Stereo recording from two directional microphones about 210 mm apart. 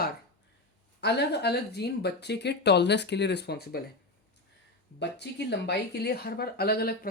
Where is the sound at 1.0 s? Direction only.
50° left (ahead or behind).